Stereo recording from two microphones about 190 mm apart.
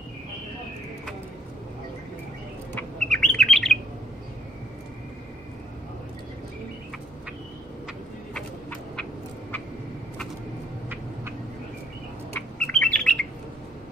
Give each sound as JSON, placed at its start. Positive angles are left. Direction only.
{"t": 2.7, "sound": "bird", "side_deg": 5}
{"t": 8.4, "sound": "fowl", "side_deg": 5}
{"t": 12.4, "sound": "bird", "side_deg": 5}